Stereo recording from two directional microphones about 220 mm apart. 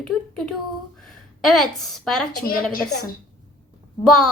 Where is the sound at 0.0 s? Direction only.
5° left (ahead or behind).